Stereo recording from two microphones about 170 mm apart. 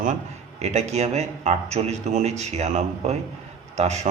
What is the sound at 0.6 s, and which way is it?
A man's voice, 40° right (ahead or behind).